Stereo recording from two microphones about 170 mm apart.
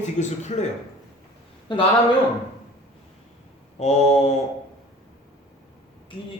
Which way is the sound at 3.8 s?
40° left (ahead or behind).